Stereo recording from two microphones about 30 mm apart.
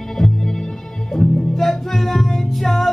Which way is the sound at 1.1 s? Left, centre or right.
Centre.